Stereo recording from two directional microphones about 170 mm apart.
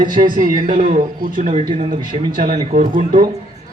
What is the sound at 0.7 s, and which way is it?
Speech, 30° right (ahead or behind).